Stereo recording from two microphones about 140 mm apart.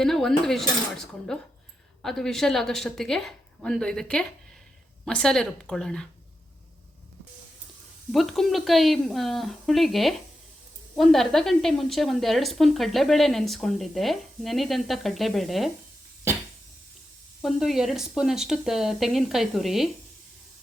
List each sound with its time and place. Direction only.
0.0 s a woman's voice: 5° left (ahead or behind)
8.1 s a woman's voice: centre (ahead or behind)
17.4 s a woman's voice: centre (ahead or behind)